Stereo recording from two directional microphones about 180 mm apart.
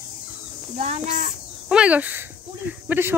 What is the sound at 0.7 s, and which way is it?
Speech, 35° right (ahead or behind).